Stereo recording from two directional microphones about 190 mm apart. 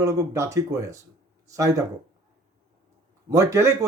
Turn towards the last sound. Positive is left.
turn(degrees=-15)  # may be behind; listen again after turning